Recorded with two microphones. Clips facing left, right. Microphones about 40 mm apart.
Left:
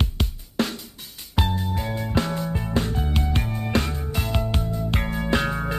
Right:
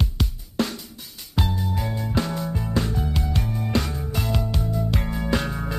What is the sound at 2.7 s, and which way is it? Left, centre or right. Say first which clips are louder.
Music: left 1 dB; left.